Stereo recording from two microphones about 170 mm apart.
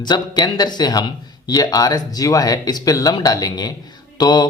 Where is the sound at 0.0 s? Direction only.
25° left (ahead or behind).